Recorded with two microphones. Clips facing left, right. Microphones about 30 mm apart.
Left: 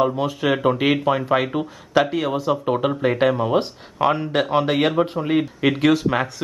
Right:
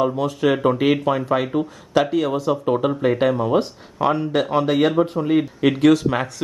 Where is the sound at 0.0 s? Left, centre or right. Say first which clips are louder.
Right 1 dB; centre.